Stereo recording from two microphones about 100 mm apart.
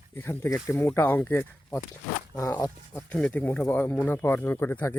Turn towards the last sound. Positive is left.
turn(degrees=20)  # may be behind; listen again after turning